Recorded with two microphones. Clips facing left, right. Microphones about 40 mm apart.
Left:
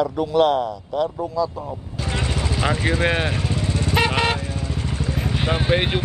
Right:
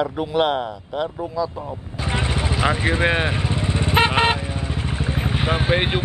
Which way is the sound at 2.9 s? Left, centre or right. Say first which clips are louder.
Right 1 dB; centre.